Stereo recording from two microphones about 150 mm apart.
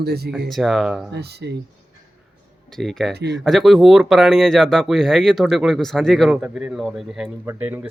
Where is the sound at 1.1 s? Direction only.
90° right.